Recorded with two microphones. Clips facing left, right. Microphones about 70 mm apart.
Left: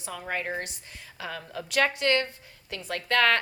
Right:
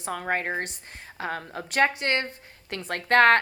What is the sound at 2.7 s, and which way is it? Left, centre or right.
Speech, right.